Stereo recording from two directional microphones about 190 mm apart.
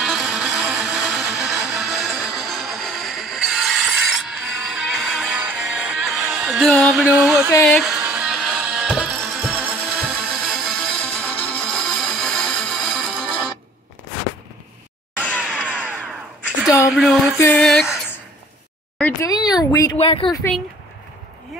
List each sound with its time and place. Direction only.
0.0 s music: centre (ahead or behind)
10.4 s music: 5° left (ahead or behind)
15.2 s a sound: 5° left (ahead or behind)
15.5 s a sound: 5° right (ahead or behind)
18.9 s speech: 10° left (ahead or behind)
19.3 s speech: 20° left (ahead or behind)
20.2 s music: centre (ahead or behind)